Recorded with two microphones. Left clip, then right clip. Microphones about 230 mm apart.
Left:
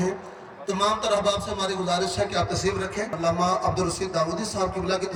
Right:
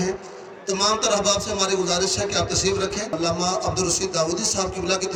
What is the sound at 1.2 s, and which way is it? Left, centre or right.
A man's voice, centre.